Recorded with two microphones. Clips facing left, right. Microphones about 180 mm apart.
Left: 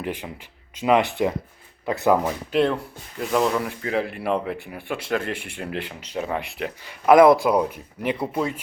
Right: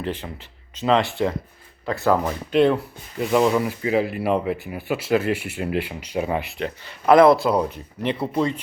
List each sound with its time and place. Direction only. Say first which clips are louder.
0.0 s speech: right 1 dB; 10° left (ahead or behind)
2.5 s speech: right 4 dB; centre (ahead or behind)